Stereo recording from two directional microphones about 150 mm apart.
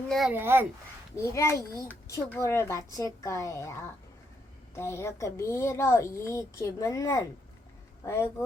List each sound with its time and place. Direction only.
0.1 s speech: centre (ahead or behind)
0.3 s speech: 15° right (ahead or behind)
1.2 s a child's voice: 20° left (ahead or behind)